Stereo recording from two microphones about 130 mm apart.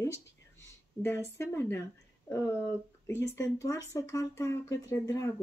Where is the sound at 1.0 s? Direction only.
20° left (ahead or behind).